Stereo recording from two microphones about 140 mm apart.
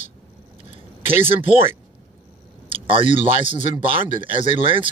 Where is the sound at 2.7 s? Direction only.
40° right (ahead or behind).